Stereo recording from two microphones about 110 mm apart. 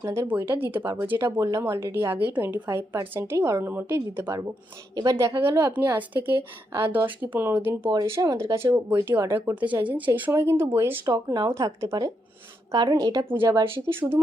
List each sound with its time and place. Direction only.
0.0 s speech: 25° right (ahead or behind)
1.4 s a woman's voice: 30° right (ahead or behind)
11.0 s a woman's voice: 35° right (ahead or behind)
11.6 s a woman's voice: 25° right (ahead or behind)
13.3 s speech: 20° right (ahead or behind)